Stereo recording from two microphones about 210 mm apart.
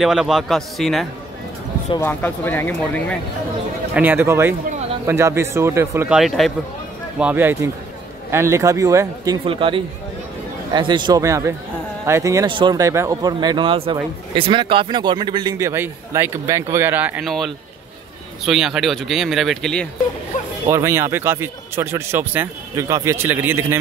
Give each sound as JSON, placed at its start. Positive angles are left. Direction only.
{"t": 0.0, "sound": "speech", "side_deg": 0}
{"t": 3.9, "sound": "a man's voice", "side_deg": -10}
{"t": 20.6, "sound": "speech", "side_deg": -10}